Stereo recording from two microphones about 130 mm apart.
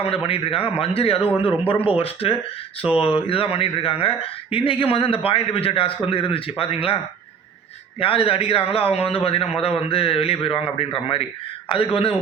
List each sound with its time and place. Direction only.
0.0 s speech: 45° left (ahead or behind)